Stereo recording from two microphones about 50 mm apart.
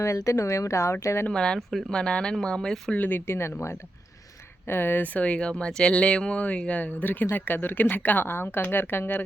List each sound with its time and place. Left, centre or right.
0.0 s speech: left
1.3 s speech: centre
2.9 s speech: left
4.7 s speech: left
5.1 s speech: left